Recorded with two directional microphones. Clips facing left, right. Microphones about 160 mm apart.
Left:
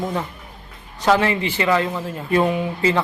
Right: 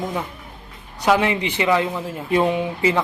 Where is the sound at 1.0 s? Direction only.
15° right (ahead or behind).